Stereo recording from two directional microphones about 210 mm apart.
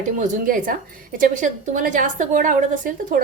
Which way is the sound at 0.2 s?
40° right (ahead or behind).